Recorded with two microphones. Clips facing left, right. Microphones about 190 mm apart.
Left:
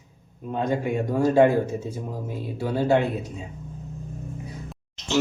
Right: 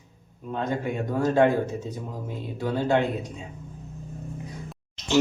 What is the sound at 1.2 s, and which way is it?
Speech, 10° left (ahead or behind).